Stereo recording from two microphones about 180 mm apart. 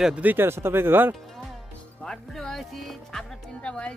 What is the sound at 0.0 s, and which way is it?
Speech, 5° right (ahead or behind).